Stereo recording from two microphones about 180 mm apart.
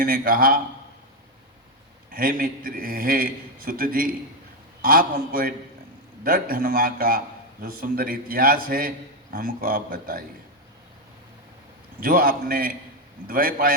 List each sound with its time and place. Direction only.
0.0 s a man's voice: 55° right (ahead or behind)
2.0 s a man's voice: 55° right (ahead or behind)
11.9 s a man's voice: 55° right (ahead or behind)